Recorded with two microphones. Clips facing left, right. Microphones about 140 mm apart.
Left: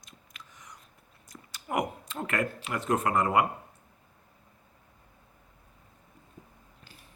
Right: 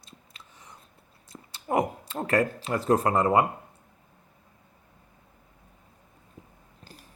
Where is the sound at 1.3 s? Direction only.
30° right (ahead or behind).